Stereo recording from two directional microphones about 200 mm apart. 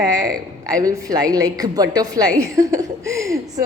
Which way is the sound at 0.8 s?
15° right (ahead or behind).